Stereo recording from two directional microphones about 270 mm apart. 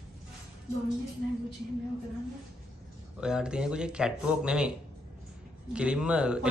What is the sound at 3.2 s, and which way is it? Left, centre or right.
Speech, centre.